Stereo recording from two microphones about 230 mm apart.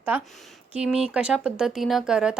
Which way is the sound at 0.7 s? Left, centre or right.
Centre.